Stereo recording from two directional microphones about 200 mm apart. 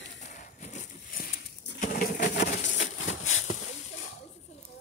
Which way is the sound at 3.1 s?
80° left.